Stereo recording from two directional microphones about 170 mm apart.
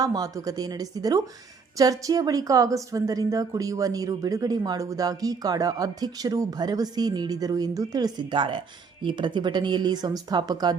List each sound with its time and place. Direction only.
0.0 s a woman's voice: 20° right (ahead or behind)